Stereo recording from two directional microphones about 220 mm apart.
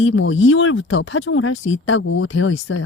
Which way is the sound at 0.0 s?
65° left (ahead or behind).